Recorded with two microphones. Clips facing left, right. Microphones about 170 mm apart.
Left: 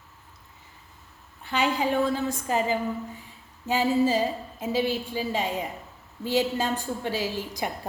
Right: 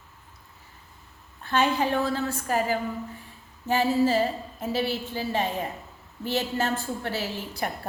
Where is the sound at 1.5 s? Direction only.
15° left (ahead or behind).